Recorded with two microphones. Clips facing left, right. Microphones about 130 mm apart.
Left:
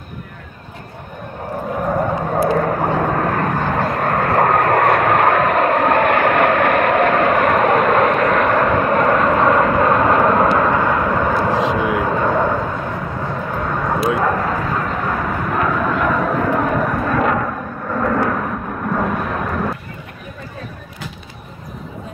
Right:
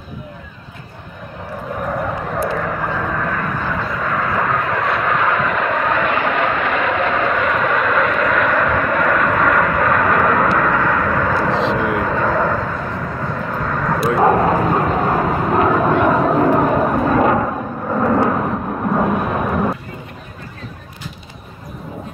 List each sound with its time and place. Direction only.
2.3 s vehicle: 45° left (ahead or behind); by 12.3 s 5° left (ahead or behind)
12.3 s vehicle: 15° left (ahead or behind)
13.5 s vehicle: 5° left (ahead or behind)
14.2 s vehicle: 25° right (ahead or behind)
16.5 s a sound: 20° right (ahead or behind)
19.1 s vehicle: 5° right (ahead or behind)